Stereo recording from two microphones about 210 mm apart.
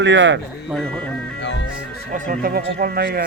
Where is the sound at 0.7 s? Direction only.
5° left (ahead or behind).